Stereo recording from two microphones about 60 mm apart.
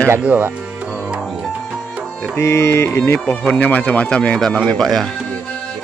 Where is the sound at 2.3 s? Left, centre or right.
Left.